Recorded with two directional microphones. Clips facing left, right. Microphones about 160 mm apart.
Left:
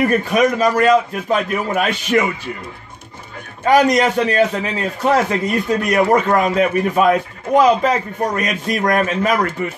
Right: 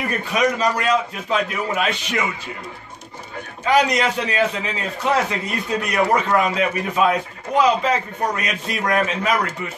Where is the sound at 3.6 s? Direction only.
45° left (ahead or behind).